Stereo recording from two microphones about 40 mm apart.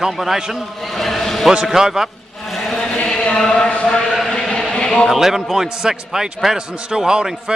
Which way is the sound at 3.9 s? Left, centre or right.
Centre.